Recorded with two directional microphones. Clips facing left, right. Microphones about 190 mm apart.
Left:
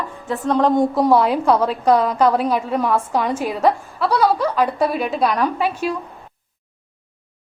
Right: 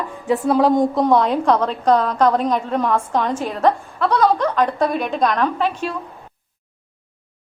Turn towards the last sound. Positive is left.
turn(degrees=10)  # may be behind; listen again after turning